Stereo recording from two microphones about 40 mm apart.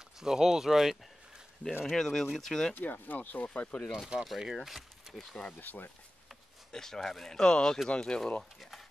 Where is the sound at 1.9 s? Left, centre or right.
Centre.